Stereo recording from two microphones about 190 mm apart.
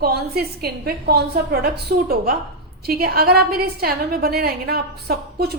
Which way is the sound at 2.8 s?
55° right (ahead or behind).